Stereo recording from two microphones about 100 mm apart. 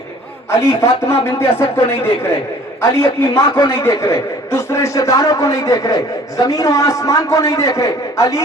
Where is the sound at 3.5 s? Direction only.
45° left (ahead or behind).